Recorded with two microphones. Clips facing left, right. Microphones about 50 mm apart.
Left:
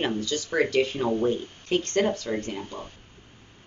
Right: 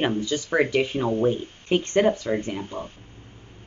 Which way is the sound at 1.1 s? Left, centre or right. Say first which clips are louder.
Right 2 dB; right.